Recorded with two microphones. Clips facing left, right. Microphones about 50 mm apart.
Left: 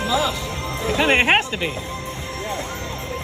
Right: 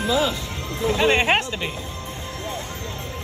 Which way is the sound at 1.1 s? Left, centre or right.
Left.